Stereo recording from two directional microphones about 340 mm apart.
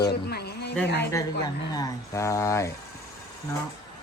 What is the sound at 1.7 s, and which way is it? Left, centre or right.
Speech, centre.